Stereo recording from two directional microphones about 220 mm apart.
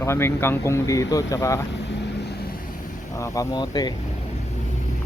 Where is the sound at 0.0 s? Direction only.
10° left (ahead or behind).